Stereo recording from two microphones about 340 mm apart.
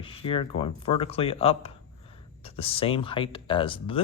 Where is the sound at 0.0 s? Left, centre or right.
Centre.